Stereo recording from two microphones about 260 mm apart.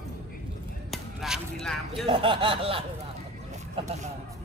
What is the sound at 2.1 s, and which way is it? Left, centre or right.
Speech, centre.